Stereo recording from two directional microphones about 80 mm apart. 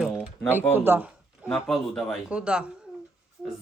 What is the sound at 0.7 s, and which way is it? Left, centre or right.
Speech, right.